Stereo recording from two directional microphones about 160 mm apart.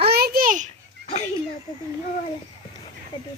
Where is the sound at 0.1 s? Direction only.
75° right (ahead or behind); by 0.7 s 55° right (ahead or behind).